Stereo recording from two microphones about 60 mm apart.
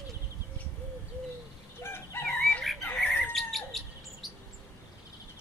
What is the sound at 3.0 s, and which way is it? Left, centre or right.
Squawk, left.